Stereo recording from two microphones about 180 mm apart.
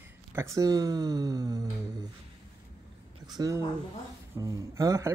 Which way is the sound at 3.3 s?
20° right (ahead or behind).